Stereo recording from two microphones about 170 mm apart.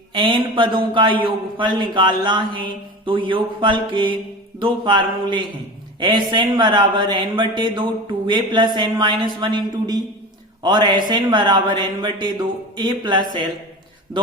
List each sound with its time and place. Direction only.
0.1 s speech: 30° right (ahead or behind)